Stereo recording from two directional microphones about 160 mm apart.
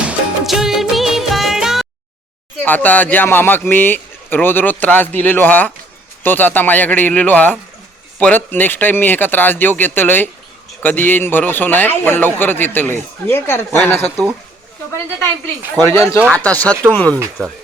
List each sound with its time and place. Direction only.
0.0 s music: 5° right (ahead or behind)
2.6 s a man's voice: 10° left (ahead or behind)